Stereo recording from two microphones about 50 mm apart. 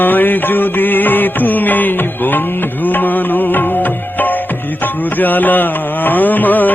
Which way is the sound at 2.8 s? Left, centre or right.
Left.